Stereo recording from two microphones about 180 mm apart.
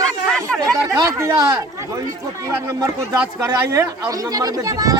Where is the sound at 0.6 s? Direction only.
20° right (ahead or behind).